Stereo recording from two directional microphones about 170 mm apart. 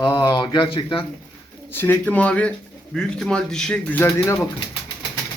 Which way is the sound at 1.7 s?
10° left (ahead or behind).